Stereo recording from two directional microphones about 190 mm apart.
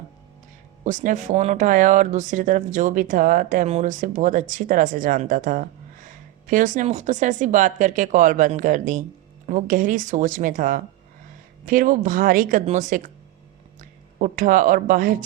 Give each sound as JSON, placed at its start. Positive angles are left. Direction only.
{"t": 0.9, "sound": "speech", "side_deg": -40}
{"t": 14.2, "sound": "speech", "side_deg": -45}